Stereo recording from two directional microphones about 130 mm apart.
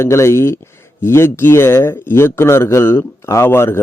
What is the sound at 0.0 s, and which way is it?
A man's voice, 20° left (ahead or behind).